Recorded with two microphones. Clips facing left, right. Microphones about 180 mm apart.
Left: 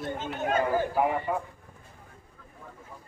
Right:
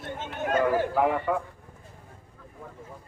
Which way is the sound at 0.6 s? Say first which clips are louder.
Right 4 dB; 75° right (ahead or behind).